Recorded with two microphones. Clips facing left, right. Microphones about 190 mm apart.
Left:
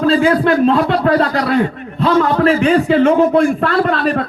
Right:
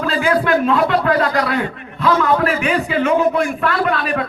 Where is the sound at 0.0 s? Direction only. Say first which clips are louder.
Left 5 dB; 30° left (ahead or behind).